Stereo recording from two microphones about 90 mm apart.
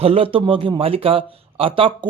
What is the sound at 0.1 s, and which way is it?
Speech, 90° right.